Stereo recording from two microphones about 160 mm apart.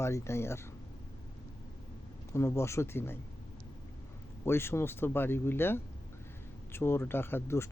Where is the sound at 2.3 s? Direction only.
15° left (ahead or behind).